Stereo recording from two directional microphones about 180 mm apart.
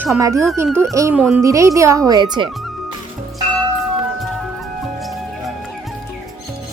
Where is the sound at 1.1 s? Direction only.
5° right (ahead or behind).